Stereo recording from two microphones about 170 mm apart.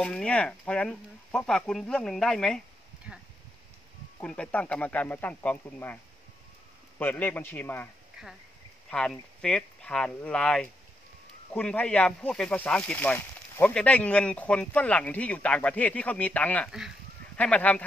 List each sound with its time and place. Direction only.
0.0 s speech: 5° left (ahead or behind)
7.0 s speech: 10° left (ahead or behind)
8.9 s speech: 5° left (ahead or behind)